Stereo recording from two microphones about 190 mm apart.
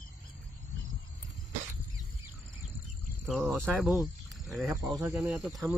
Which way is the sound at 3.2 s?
5° right (ahead or behind).